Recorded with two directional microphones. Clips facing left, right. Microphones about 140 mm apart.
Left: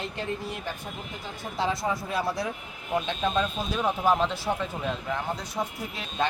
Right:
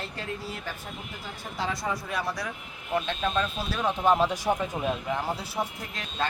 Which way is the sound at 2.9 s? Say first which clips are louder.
Left 1 dB; 10° left (ahead or behind).